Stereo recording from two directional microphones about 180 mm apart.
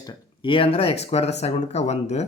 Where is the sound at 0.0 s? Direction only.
25° left (ahead or behind).